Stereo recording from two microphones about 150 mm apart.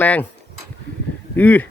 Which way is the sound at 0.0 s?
10° left (ahead or behind).